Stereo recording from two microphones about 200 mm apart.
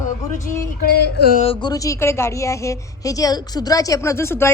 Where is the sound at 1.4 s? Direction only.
25° left (ahead or behind).